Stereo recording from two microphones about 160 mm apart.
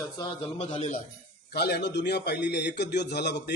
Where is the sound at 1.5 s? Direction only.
85° left.